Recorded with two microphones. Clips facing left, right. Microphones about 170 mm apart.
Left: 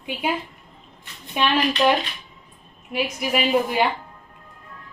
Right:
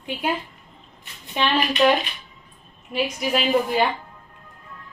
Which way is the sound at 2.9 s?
5° left (ahead or behind).